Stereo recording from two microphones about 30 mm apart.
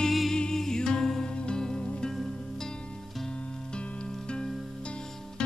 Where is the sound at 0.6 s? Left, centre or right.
Centre.